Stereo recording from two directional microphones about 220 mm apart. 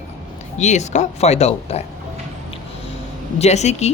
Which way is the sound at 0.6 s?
30° left (ahead or behind).